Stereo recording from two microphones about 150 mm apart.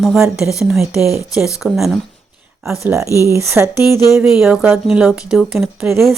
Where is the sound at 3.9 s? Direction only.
25° left (ahead or behind).